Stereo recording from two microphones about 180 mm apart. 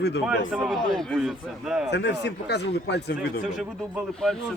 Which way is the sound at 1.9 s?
70° left (ahead or behind).